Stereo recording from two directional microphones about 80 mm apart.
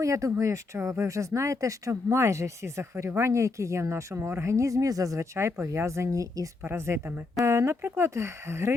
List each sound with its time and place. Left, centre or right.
0.0 s speech: right
6.7 s speech: right